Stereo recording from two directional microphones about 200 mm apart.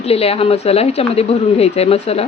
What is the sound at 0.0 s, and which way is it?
Speech, 30° left (ahead or behind).